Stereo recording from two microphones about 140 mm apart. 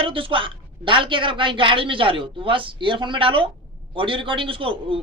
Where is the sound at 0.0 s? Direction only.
40° right (ahead or behind).